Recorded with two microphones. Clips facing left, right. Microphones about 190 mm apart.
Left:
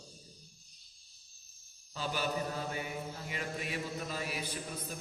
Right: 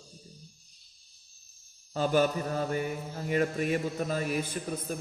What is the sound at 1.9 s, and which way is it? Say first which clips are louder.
A man's voice: right 10 dB; 50° right (ahead or behind).